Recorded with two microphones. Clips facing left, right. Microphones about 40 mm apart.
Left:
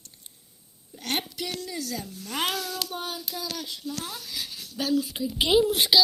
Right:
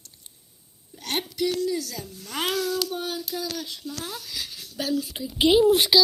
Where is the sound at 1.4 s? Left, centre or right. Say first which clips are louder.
Right 8 dB; left.